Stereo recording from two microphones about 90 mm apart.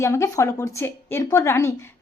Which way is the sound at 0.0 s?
35° left (ahead or behind).